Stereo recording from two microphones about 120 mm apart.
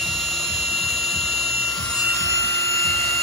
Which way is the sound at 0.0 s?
Centre (ahead or behind).